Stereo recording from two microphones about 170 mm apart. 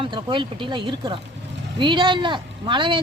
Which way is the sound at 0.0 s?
30° right (ahead or behind).